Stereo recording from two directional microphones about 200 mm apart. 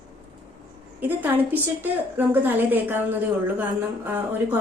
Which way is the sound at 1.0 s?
10° right (ahead or behind).